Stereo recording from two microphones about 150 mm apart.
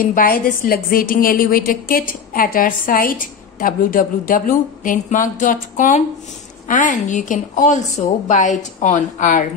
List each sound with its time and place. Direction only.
0.0 s a woman's voice: 70° left (ahead or behind)